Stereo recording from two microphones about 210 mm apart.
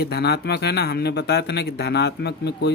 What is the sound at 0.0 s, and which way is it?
A man's voice, 50° left (ahead or behind).